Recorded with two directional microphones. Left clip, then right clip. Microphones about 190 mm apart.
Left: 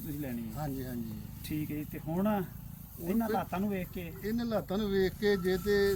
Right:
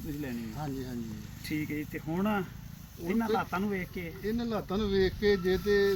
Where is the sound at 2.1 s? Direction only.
20° left (ahead or behind).